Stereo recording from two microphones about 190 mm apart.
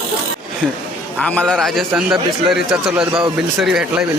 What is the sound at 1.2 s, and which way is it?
A man's voice, 5° left (ahead or behind).